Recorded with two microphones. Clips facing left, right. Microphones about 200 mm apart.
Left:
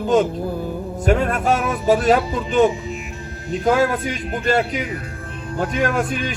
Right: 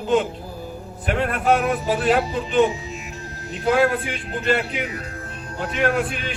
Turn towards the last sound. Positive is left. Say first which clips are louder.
# left 1 dB
turn(degrees=45)  # may be behind; listen again after turning